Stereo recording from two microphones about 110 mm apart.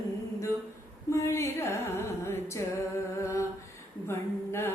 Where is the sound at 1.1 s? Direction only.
25° left (ahead or behind).